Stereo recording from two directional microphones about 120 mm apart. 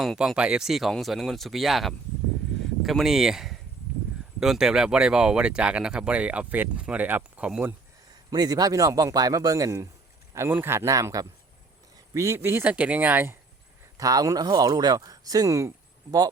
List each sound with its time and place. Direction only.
0.0 s speech: centre (ahead or behind)
8.3 s speech: 35° right (ahead or behind); by 13.3 s 15° right (ahead or behind)
13.9 s speech: 30° right (ahead or behind)